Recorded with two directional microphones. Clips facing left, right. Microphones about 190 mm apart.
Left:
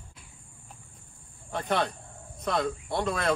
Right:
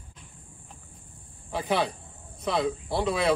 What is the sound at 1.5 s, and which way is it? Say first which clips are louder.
Speech: right 2 dB; centre (ahead or behind).